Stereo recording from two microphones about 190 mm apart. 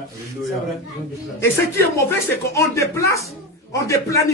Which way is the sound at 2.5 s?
15° left (ahead or behind).